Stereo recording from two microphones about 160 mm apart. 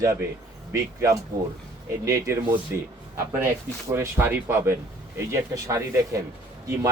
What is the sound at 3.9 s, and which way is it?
Speech, 15° right (ahead or behind).